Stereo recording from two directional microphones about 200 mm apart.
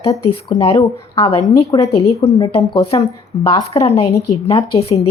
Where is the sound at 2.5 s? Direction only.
30° left (ahead or behind).